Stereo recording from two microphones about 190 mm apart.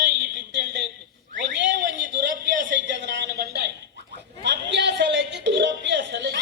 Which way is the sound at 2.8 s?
65° right (ahead or behind).